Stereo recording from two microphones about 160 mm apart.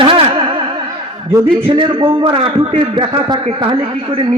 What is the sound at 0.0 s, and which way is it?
Music, 35° right (ahead or behind).